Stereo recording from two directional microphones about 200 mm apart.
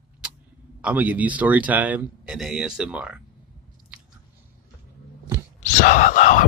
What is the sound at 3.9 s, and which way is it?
Biting, 5° right (ahead or behind).